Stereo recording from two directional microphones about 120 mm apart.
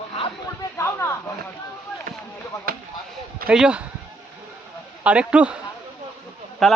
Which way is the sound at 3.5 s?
10° right (ahead or behind).